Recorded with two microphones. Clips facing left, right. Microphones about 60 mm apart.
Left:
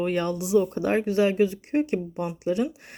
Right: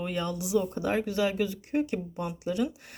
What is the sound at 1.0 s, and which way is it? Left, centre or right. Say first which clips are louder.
Speech: left 6 dB; left.